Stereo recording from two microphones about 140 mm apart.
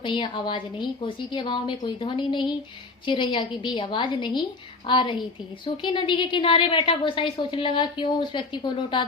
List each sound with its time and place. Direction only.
0.0 s a woman's voice: 35° left (ahead or behind)